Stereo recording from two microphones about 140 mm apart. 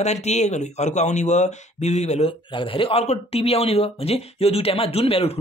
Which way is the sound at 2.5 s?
40° left (ahead or behind).